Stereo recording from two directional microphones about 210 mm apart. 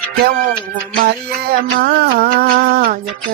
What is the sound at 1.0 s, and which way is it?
Music, 45° right (ahead or behind).